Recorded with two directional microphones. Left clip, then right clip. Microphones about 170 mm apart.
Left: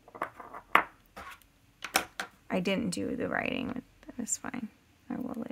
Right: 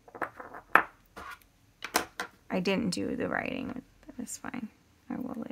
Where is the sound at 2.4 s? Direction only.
5° left (ahead or behind).